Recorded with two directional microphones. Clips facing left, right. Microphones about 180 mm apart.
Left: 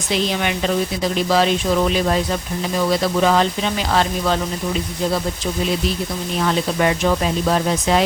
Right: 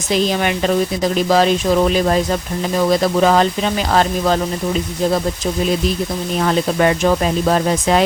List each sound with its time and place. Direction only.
0.1 s speech: 45° right (ahead or behind)
6.4 s speech: 45° right (ahead or behind)